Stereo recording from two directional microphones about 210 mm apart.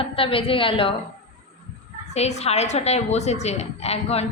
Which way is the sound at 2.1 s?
30° left (ahead or behind).